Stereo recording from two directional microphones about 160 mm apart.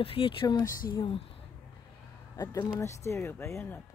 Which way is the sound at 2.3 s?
20° left (ahead or behind).